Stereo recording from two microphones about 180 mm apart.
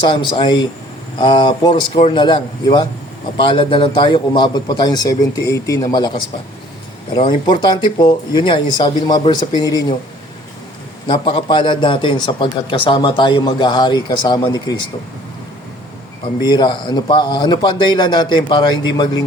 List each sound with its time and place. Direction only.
0.1 s a man's voice: 25° left (ahead or behind)
11.0 s a man's voice: 30° left (ahead or behind)
16.4 s a man's voice: 25° left (ahead or behind)